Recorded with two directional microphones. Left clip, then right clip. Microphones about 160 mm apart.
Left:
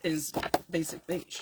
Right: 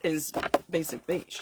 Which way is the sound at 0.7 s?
50° right (ahead or behind).